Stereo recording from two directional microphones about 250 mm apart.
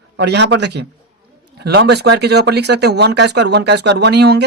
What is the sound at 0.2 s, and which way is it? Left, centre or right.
A man's voice, right.